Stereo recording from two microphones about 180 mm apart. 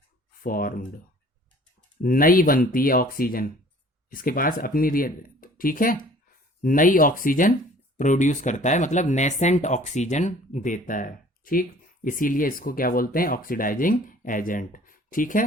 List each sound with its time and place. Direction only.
0.4 s speech: 55° left (ahead or behind)
2.0 s speech: 50° left (ahead or behind)